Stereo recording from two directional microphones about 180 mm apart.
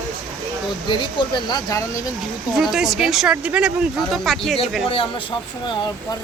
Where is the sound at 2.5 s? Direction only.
Centre (ahead or behind).